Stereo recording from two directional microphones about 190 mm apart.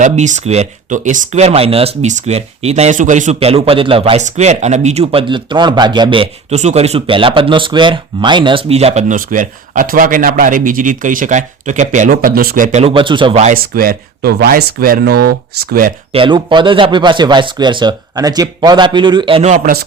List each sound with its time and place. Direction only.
0.0 s speech: 40° right (ahead or behind)
13.5 s speech: 50° right (ahead or behind)
16.1 s speech: 25° right (ahead or behind); by 19.8 s 45° right (ahead or behind)